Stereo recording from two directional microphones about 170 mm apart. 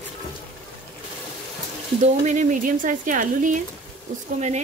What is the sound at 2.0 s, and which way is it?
Speech, 45° right (ahead or behind).